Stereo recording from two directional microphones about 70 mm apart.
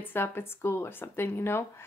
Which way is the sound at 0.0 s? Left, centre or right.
Left.